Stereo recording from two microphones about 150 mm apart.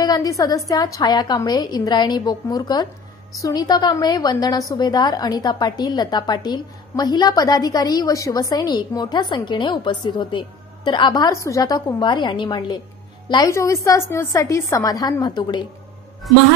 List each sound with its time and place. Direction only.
0.0 s a woman's voice: 25° left (ahead or behind)